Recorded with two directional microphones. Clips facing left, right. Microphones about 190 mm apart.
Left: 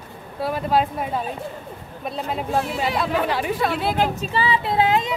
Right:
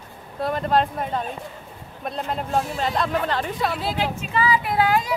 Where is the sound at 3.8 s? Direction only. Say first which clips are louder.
Left 4 dB; 55° left (ahead or behind).